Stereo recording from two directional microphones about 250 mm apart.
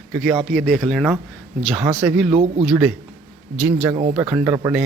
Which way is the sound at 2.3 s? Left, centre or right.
Right.